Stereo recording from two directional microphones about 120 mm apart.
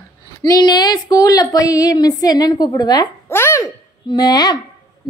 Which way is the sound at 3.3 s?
20° left (ahead or behind).